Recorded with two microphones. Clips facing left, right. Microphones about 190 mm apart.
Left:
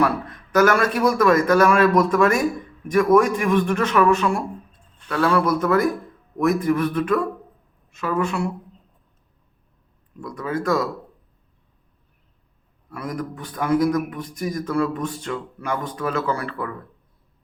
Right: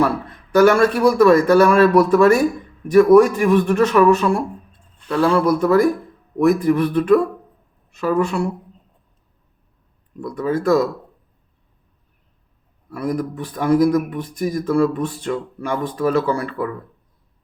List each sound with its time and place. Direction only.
0.5 s a man's voice: 30° right (ahead or behind)
10.2 s a man's voice: 35° right (ahead or behind)
12.9 s a man's voice: 35° right (ahead or behind)